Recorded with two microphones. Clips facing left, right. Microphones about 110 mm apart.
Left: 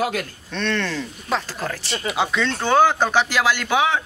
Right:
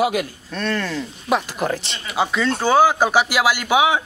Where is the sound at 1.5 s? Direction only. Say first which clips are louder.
Right 4 dB; 20° right (ahead or behind).